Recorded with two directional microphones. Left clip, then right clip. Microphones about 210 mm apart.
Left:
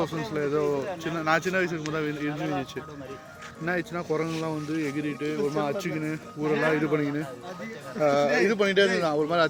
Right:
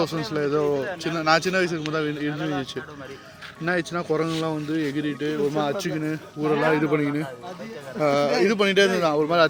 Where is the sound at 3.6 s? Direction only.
30° right (ahead or behind).